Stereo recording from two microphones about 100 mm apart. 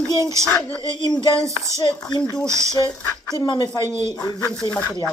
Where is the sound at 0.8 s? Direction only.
50° left (ahead or behind).